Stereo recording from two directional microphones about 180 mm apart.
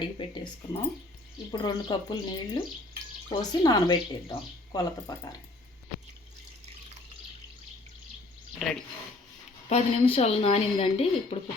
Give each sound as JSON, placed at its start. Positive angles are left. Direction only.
{"t": 0.0, "sound": "a woman's voice", "side_deg": 25}
{"t": 8.5, "sound": "speech", "side_deg": 0}
{"t": 9.6, "sound": "a woman's voice", "side_deg": 35}